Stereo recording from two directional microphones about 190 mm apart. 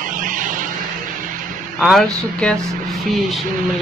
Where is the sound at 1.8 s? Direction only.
Centre (ahead or behind).